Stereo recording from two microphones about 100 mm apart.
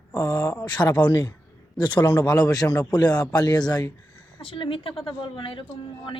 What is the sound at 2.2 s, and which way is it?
Speech, 40° left (ahead or behind).